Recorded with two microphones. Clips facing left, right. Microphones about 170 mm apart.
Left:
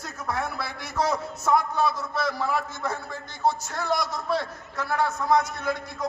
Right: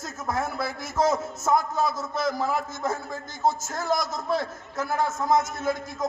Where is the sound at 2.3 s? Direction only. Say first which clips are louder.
Right 2 dB; 45° right (ahead or behind).